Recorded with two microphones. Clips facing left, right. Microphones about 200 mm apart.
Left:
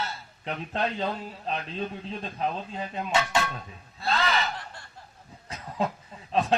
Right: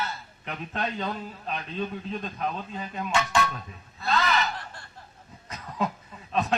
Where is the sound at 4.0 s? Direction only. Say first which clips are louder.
Right 1 dB; 30° left (ahead or behind).